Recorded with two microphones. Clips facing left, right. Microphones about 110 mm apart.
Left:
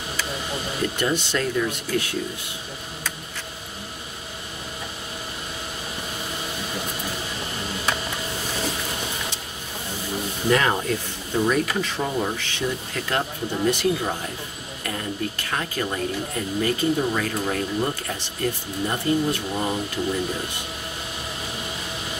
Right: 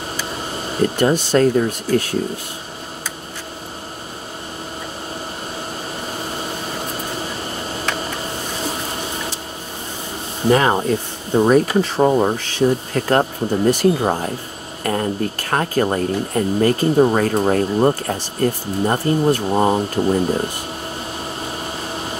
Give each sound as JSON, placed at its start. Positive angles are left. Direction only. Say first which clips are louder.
{"t": 0.7, "sound": "speech", "louder": "right 9 dB", "side_deg": -45}
{"t": 10.5, "sound": "speech", "louder": "right 6 dB", "side_deg": -35}